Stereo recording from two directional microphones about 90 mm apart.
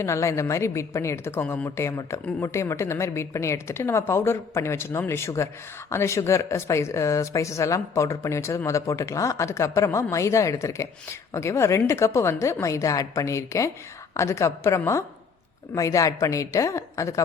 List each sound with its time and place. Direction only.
0.0 s speech: 35° left (ahead or behind)